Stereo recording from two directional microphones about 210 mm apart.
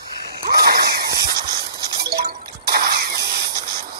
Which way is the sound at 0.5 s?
50° right (ahead or behind).